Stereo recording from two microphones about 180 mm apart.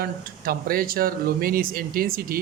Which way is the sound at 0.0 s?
55° right (ahead or behind).